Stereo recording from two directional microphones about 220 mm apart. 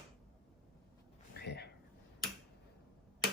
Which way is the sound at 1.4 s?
45° left (ahead or behind).